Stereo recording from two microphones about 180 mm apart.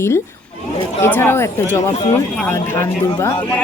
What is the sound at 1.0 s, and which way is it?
Speech, 15° left (ahead or behind).